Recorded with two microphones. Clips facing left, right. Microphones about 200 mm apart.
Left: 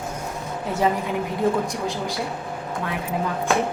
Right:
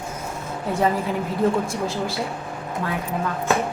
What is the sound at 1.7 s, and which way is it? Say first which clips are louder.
Speech: right 1 dB; 15° left (ahead or behind).